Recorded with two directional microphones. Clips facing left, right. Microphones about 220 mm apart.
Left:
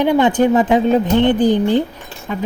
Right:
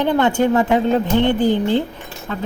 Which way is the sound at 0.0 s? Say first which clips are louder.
Left 3 dB; 15° left (ahead or behind).